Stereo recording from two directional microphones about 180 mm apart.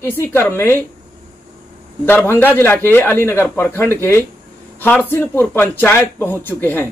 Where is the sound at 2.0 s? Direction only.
15° left (ahead or behind).